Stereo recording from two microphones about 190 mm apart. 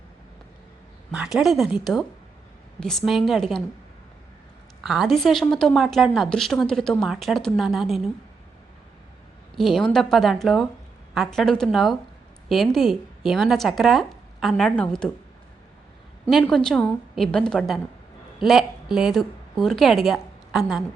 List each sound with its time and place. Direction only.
1.1 s a woman's voice: 5° right (ahead or behind)
4.8 s a woman's voice: centre (ahead or behind)
9.6 s a woman's voice: centre (ahead or behind)
16.2 s a woman's voice: 5° left (ahead or behind)